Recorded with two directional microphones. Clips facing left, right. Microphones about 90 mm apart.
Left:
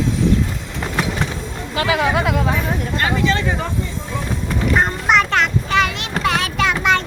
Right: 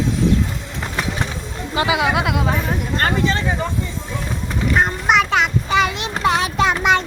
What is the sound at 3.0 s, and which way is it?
Speech, 45° right (ahead or behind).